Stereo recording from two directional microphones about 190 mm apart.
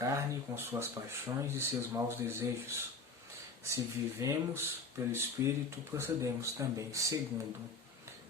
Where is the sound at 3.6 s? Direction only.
15° right (ahead or behind).